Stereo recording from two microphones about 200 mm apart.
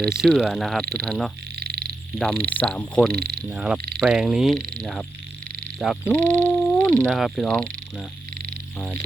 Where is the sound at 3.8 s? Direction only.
55° right (ahead or behind).